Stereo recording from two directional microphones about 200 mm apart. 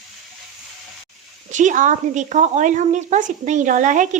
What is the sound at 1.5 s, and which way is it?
Speech, 40° right (ahead or behind).